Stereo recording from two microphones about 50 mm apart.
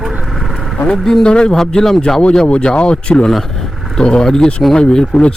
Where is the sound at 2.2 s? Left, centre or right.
Centre.